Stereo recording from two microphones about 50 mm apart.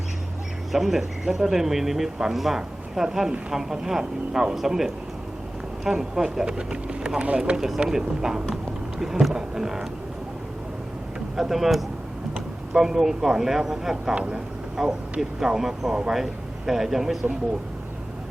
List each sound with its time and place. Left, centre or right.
0.7 s speech: centre
5.9 s speech: centre
11.3 s speech: centre
14.8 s speech: centre